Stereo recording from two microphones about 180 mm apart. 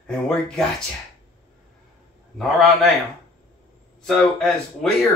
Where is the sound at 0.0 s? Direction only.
5° left (ahead or behind).